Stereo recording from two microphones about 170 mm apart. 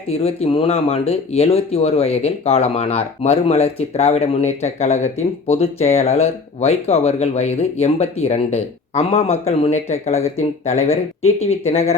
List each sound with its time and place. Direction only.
0.1 s speech: 40° left (ahead or behind)